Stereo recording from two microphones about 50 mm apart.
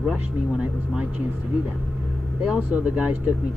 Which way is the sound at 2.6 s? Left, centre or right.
Right.